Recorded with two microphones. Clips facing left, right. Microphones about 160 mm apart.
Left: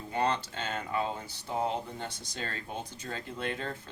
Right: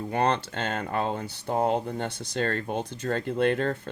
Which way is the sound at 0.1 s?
65° right (ahead or behind).